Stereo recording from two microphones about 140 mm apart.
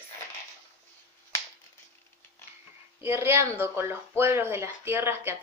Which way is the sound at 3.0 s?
15° right (ahead or behind).